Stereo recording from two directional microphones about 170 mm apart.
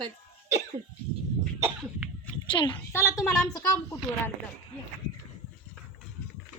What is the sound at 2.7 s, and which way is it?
Speech, 15° left (ahead or behind).